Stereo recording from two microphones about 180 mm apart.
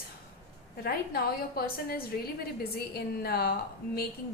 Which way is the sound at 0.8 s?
55° left (ahead or behind).